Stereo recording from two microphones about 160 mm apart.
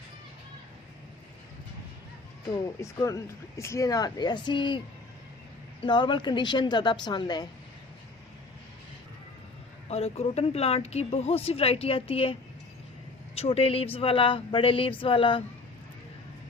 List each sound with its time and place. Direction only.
3.0 s speech: 20° left (ahead or behind)
5.8 s speech: 30° left (ahead or behind)
9.9 s a woman's voice: 40° left (ahead or behind)